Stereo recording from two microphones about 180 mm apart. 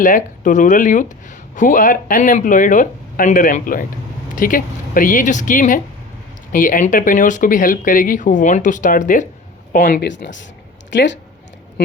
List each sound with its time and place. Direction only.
0.0 s speech: 45° left (ahead or behind)
10.0 s speech: 75° left (ahead or behind)